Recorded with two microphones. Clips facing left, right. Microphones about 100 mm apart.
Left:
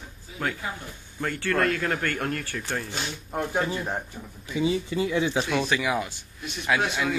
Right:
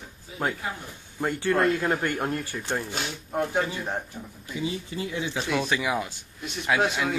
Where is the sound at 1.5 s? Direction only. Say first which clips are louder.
Right 1 dB; centre (ahead or behind).